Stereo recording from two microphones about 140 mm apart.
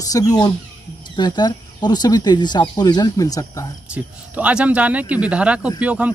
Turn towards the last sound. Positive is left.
turn(degrees=-10)  # may be behind; listen again after turning